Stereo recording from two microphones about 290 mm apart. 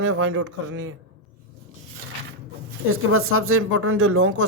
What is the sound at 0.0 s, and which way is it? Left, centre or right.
Speech, right.